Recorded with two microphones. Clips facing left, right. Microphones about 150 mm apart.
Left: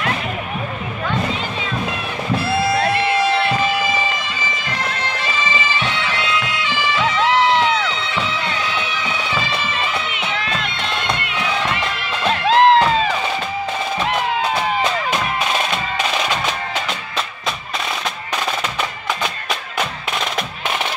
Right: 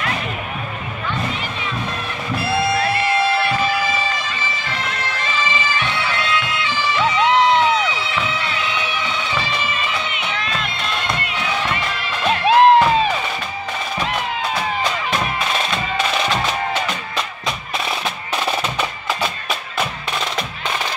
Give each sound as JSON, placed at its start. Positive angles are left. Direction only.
{"t": 7.2, "sound": "crowd", "side_deg": -20}
{"t": 12.4, "sound": "music", "side_deg": -15}